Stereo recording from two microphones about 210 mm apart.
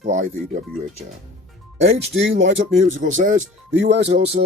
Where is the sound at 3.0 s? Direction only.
40° right (ahead or behind).